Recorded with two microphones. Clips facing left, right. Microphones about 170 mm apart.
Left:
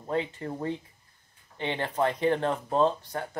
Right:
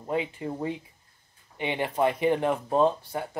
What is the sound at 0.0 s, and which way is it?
Speech, 10° right (ahead or behind).